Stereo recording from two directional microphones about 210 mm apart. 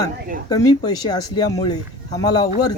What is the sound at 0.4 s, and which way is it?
Speech, 15° left (ahead or behind).